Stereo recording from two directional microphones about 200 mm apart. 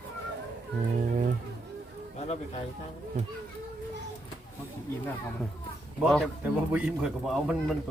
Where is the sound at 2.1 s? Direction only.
35° left (ahead or behind).